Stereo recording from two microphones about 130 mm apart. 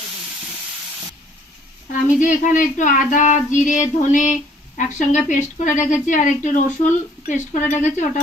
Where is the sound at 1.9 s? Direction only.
70° left (ahead or behind).